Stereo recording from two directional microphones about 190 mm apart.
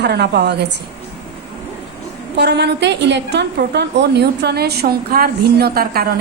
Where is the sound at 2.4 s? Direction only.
60° right (ahead or behind).